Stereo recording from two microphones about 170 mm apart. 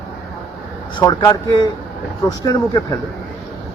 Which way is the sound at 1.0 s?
20° left (ahead or behind).